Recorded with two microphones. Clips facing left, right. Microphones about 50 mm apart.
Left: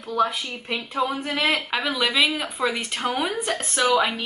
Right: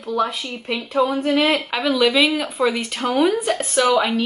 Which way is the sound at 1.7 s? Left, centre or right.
Centre.